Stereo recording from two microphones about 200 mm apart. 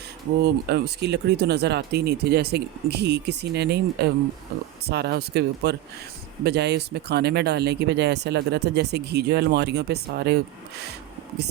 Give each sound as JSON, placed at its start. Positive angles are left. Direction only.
{"t": 0.4, "sound": "speech", "side_deg": -55}